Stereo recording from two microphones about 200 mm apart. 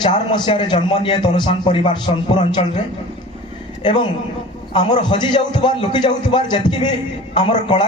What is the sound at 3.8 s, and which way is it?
A woman's voice, 25° left (ahead or behind).